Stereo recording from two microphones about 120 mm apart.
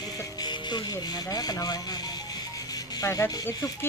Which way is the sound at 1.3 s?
35° left (ahead or behind).